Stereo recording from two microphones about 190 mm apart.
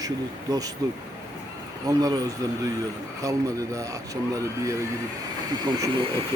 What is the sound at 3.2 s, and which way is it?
Speech, 15° right (ahead or behind).